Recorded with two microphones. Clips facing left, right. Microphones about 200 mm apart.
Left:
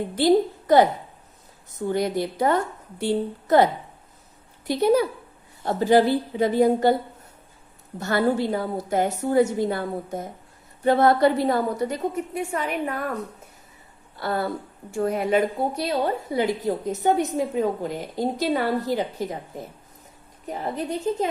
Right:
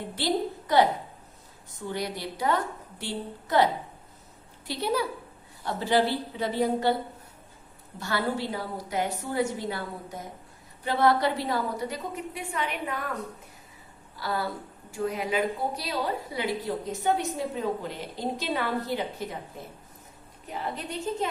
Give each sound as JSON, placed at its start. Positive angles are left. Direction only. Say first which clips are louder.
{"t": 0.2, "sound": "a woman's voice", "louder": "left 9 dB", "side_deg": 45}
{"t": 1.9, "sound": "a woman's voice", "louder": "left 8 dB", "side_deg": 50}
{"t": 4.6, "sound": "a woman's voice", "louder": "left 9 dB", "side_deg": 45}
{"t": 7.9, "sound": "a woman's voice", "louder": "left 7 dB", "side_deg": 45}
{"t": 14.2, "sound": "a woman's voice", "louder": "left 5 dB", "side_deg": 55}
{"t": 20.5, "sound": "a woman's voice", "louder": "left 6 dB", "side_deg": 40}